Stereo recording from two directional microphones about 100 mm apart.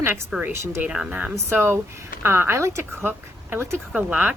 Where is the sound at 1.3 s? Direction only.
25° right (ahead or behind).